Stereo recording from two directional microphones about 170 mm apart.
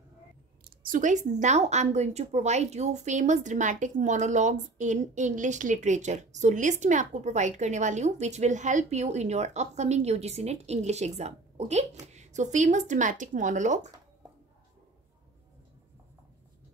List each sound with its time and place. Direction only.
0.8 s a woman's voice: 50° right (ahead or behind)